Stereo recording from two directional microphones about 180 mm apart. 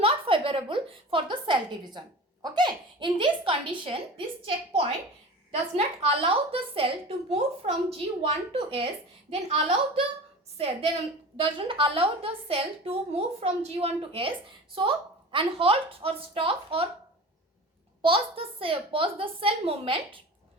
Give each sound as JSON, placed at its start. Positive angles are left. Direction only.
{"t": 0.0, "sound": "a woman's voice", "side_deg": -30}
{"t": 18.0, "sound": "a woman's voice", "side_deg": -30}